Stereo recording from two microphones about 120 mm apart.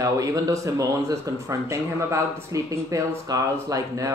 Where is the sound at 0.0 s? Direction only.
25° right (ahead or behind).